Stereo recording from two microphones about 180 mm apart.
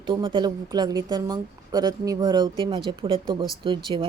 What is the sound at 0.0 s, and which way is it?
Speech, 30° right (ahead or behind).